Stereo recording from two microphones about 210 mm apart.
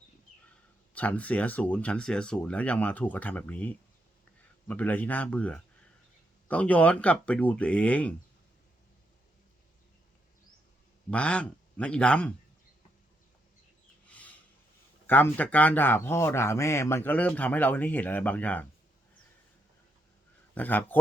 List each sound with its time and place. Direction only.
0.3 s a sound: 40° left (ahead or behind)
0.9 s a man's voice: 5° left (ahead or behind)
11.1 s speech: 5° left (ahead or behind)
14.1 s a sound: 5° left (ahead or behind)
15.0 s a man's voice: 10° left (ahead or behind)
20.6 s a man's voice: 10° left (ahead or behind)